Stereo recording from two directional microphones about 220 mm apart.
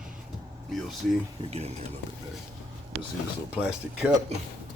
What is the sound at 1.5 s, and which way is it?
Speech, 30° right (ahead or behind).